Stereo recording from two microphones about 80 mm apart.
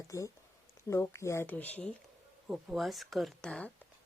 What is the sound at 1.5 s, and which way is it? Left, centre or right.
Speech, left.